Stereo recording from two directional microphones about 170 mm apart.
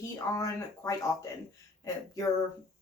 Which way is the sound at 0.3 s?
20° left (ahead or behind).